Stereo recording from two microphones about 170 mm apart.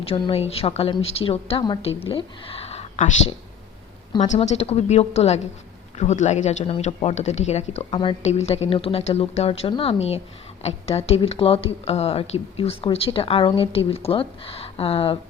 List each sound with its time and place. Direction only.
0.0 s speech: 35° left (ahead or behind)